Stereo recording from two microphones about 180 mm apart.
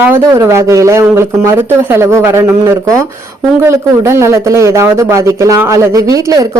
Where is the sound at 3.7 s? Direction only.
15° right (ahead or behind).